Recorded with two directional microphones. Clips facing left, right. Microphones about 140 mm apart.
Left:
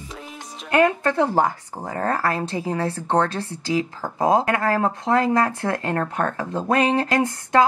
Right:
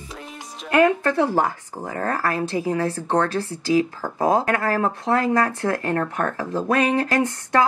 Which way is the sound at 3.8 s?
25° left (ahead or behind).